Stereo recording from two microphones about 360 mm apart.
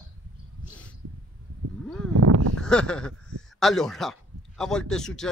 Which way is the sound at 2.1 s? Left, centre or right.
Right.